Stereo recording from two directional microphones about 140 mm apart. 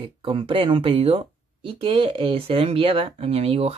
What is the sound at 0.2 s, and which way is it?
Speech, 40° right (ahead or behind).